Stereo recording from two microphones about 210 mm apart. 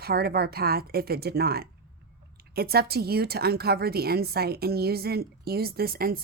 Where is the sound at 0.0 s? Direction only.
50° right (ahead or behind).